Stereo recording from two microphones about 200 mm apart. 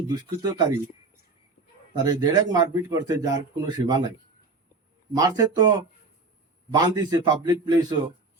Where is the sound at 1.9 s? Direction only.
20° right (ahead or behind).